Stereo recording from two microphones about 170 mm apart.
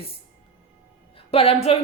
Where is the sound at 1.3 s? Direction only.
35° left (ahead or behind).